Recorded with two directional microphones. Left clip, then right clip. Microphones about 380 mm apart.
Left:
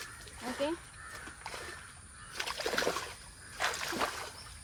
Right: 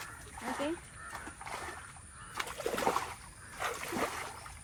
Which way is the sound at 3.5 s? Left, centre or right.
Centre.